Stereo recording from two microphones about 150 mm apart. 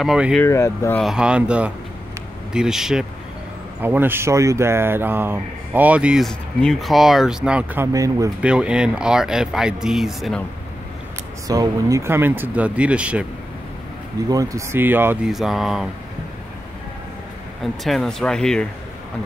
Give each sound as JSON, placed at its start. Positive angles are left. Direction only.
{"t": 0.0, "sound": "speech", "side_deg": 0}
{"t": 0.4, "sound": "speech", "side_deg": 15}
{"t": 0.9, "sound": "speech", "side_deg": -5}
{"t": 3.8, "sound": "speech", "side_deg": -15}
{"t": 8.4, "sound": "speech", "side_deg": -5}
{"t": 11.4, "sound": "speech", "side_deg": -25}
{"t": 14.3, "sound": "speech", "side_deg": -20}
{"t": 15.2, "sound": "speech", "side_deg": 0}
{"t": 17.8, "sound": "speech", "side_deg": 0}